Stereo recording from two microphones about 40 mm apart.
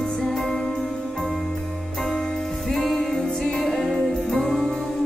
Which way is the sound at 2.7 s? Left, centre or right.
Centre.